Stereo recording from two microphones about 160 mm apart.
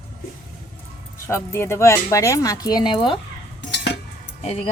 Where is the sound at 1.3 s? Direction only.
15° left (ahead or behind).